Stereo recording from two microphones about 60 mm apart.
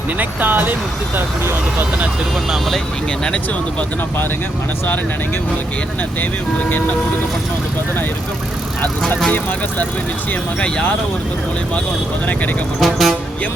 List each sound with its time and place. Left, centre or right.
0.2 s speech: right
2.5 s speech: centre
3.2 s speech: centre
6.7 s speech: left
10.6 s speech: centre
12.8 s speech: centre